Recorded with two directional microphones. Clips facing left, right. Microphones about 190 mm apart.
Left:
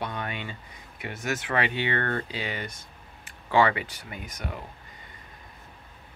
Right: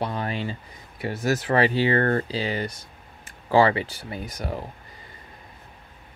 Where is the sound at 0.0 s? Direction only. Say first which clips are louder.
Right 6 dB; 35° right (ahead or behind).